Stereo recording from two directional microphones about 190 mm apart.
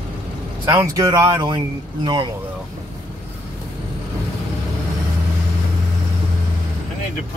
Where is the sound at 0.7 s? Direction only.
15° right (ahead or behind).